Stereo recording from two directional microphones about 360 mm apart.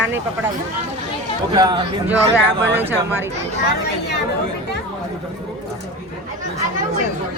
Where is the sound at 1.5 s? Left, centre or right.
Centre.